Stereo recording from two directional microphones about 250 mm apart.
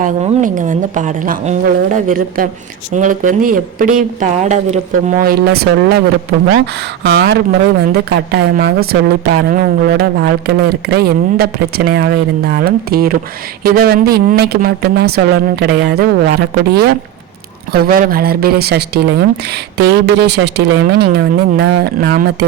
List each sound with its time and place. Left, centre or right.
0.0 s a woman's voice: right
7.0 s a woman's voice: right